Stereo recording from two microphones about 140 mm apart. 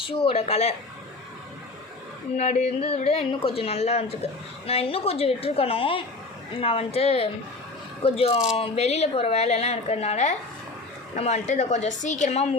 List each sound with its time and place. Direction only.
0.1 s speech: 40° left (ahead or behind)
2.3 s speech: 55° left (ahead or behind)